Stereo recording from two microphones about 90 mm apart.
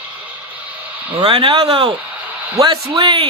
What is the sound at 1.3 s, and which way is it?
Speech, 90° right.